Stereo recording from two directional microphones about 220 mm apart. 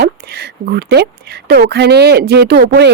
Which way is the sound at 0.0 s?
45° right (ahead or behind).